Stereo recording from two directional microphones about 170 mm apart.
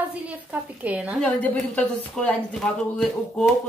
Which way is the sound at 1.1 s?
10° left (ahead or behind).